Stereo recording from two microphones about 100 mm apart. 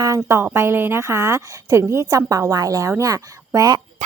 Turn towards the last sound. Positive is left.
turn(degrees=-35)  # may be behind; listen again after turning